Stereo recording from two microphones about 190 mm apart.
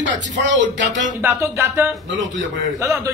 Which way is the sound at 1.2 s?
10° right (ahead or behind).